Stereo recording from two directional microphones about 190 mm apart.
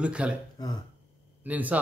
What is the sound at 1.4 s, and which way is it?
Speech, 10° right (ahead or behind).